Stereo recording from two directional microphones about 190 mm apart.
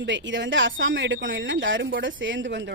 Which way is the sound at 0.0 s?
70° right (ahead or behind).